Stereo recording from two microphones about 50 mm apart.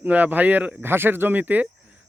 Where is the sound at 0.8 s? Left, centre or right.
Right.